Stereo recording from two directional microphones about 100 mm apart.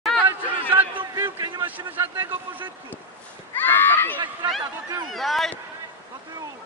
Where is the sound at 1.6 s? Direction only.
20° right (ahead or behind).